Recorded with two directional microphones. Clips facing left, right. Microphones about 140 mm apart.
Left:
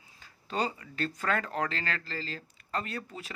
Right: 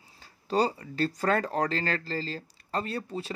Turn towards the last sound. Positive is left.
turn(degrees=-30)  # may be behind; listen again after turning